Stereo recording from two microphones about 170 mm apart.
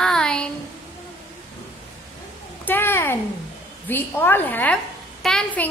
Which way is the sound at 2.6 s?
10° left (ahead or behind).